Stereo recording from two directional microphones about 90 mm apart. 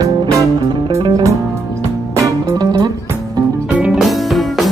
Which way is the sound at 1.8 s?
35° right (ahead or behind).